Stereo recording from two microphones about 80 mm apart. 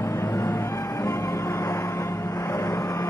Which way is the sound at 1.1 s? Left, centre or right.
Left.